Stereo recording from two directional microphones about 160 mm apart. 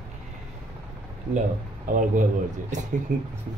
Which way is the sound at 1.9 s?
60° right (ahead or behind).